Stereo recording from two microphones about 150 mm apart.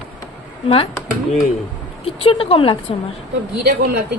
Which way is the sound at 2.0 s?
40° left (ahead or behind).